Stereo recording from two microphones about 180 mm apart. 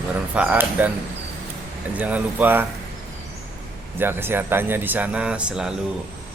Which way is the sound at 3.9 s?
10° right (ahead or behind).